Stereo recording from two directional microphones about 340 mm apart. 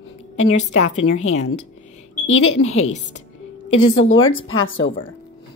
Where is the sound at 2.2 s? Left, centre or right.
Left.